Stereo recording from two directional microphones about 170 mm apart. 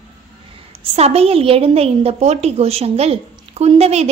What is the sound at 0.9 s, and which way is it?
A woman's voice, 35° right (ahead or behind).